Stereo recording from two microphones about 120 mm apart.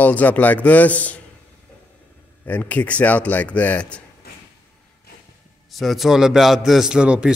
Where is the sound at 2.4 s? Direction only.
15° left (ahead or behind).